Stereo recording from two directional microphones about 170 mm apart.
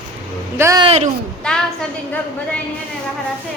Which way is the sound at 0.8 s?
35° right (ahead or behind).